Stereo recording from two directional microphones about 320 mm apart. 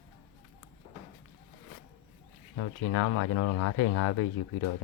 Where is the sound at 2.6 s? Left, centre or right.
Left.